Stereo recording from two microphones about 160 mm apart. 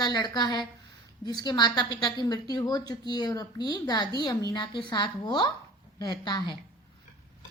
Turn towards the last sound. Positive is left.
turn(degrees=25)  # may be behind; listen again after turning